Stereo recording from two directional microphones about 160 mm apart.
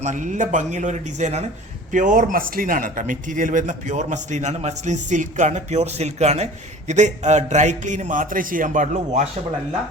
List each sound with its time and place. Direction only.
0.0 s a man's voice: 50° right (ahead or behind)